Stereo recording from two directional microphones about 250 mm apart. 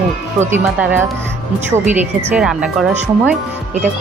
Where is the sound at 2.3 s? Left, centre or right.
Centre.